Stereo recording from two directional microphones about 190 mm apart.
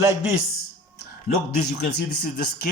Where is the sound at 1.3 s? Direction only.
50° left (ahead or behind).